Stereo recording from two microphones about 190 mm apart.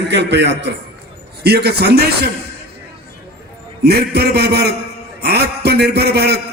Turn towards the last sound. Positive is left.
turn(degrees=-60)  # may be behind; listen again after turning